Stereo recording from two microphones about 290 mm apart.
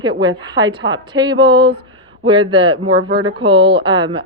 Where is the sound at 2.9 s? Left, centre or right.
Right.